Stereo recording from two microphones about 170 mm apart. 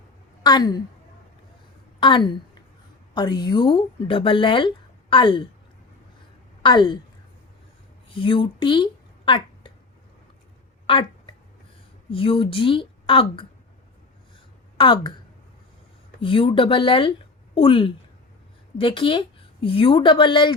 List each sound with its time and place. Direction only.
0.4 s speech: 25° left (ahead or behind)
2.0 s a woman's voice: 30° left (ahead or behind)
6.6 s a woman's voice: 25° left (ahead or behind)
8.1 s a sound: 30° left (ahead or behind)
10.8 s a sound: 30° left (ahead or behind)
12.1 s a woman's voice: 30° left (ahead or behind)
14.8 s speech: 30° left (ahead or behind)
16.2 s a woman's voice: 30° left (ahead or behind)